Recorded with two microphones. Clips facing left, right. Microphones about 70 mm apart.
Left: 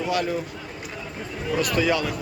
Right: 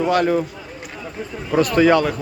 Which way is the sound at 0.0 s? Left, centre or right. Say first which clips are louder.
Right 7 dB; right.